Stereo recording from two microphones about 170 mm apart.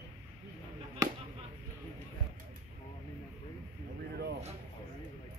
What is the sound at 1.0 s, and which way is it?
Chop, 20° right (ahead or behind).